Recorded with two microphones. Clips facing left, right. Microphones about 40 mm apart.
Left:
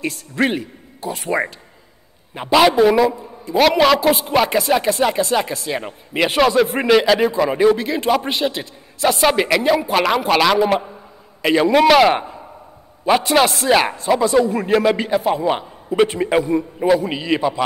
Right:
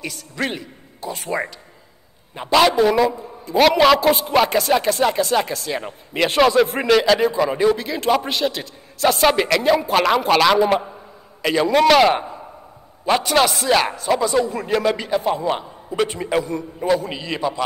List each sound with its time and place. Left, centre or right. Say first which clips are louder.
0.0 s a man's voice: left 6 dB; left
1.1 s a man's voice: left 4 dB; centre
2.5 s a man's voice: left 2 dB; centre
9.0 s a man's voice: even; centre
11.4 s a man's voice: left 2 dB; centre
14.4 s speech: left 4 dB; left
14.7 s a man's voice: left 3 dB; centre